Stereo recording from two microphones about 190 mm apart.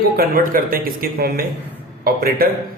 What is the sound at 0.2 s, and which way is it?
Speech, 50° right (ahead or behind).